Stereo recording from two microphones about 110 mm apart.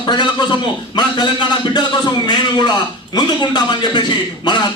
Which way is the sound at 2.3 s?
40° left (ahead or behind).